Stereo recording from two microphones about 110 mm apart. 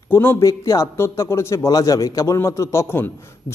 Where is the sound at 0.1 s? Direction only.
20° left (ahead or behind).